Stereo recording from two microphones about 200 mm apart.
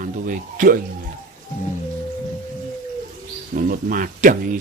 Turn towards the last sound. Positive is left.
turn(degrees=-40)  # may be behind; listen again after turning